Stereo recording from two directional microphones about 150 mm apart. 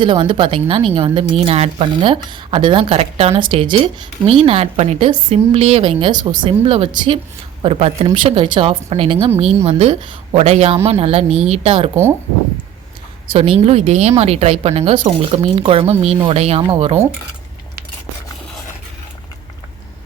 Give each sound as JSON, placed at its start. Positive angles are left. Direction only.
{"t": 0.0, "sound": "a woman's voice", "side_deg": -35}
{"t": 13.3, "sound": "a woman's voice", "side_deg": -40}